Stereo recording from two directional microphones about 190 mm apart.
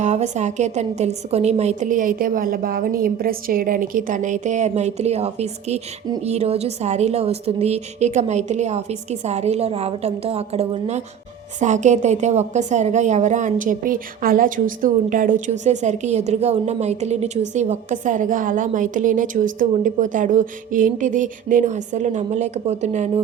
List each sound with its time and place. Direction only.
0.0 s a woman's voice: 35° right (ahead or behind)